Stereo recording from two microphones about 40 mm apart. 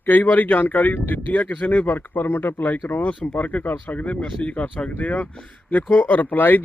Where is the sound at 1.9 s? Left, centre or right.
Left.